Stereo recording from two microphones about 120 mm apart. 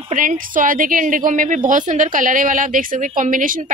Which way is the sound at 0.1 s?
90° right.